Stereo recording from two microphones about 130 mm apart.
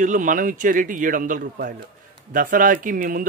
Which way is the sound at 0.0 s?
80° right.